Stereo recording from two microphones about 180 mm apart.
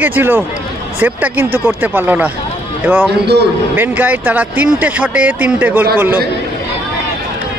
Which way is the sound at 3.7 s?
10° right (ahead or behind).